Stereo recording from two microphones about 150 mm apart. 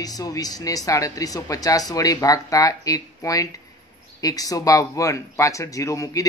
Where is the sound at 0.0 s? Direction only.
25° left (ahead or behind).